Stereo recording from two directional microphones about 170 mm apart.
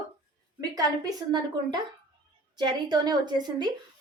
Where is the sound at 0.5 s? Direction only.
20° right (ahead or behind).